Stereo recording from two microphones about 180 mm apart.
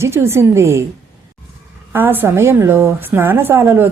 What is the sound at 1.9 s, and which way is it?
A woman's voice, 10° right (ahead or behind).